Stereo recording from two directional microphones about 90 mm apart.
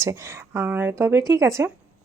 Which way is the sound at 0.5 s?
20° right (ahead or behind).